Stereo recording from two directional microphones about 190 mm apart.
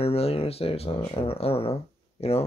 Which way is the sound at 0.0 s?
30° left (ahead or behind).